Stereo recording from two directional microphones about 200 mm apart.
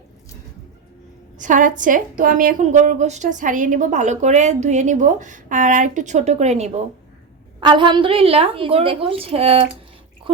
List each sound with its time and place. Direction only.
1.4 s a woman's voice: 40° right (ahead or behind)
7.6 s a woman's voice: 25° right (ahead or behind)